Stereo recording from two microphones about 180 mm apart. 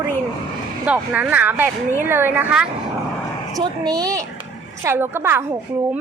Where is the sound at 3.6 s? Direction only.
20° right (ahead or behind).